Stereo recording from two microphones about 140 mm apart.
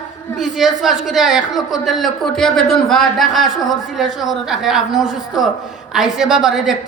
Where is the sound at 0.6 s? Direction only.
Centre (ahead or behind).